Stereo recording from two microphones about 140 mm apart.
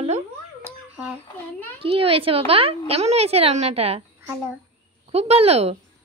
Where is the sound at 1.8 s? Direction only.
40° right (ahead or behind).